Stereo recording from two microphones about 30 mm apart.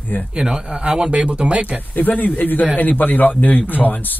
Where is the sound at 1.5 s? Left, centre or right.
Right.